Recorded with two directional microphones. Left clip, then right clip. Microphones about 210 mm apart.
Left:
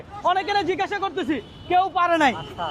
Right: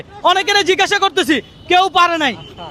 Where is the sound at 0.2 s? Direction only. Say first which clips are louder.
Right 8 dB; 30° right (ahead or behind).